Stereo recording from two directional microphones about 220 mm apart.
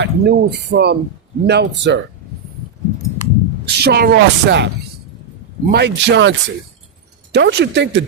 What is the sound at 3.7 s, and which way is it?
Speech, 45° right (ahead or behind).